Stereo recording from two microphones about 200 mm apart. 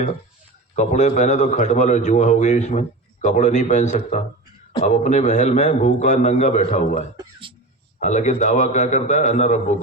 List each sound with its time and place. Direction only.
0.8 s a man's voice: 35° left (ahead or behind)